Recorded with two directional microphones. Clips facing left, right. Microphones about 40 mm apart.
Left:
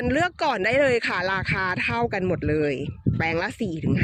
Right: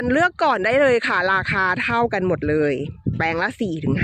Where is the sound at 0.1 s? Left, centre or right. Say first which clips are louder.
Right 7 dB; right.